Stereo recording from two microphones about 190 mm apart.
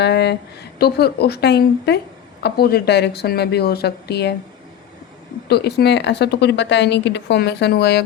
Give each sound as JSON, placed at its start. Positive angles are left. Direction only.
{"t": 0.0, "sound": "speech", "side_deg": 65}
{"t": 5.5, "sound": "speech", "side_deg": 60}